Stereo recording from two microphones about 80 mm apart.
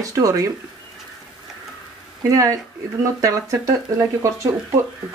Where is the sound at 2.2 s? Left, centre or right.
Right.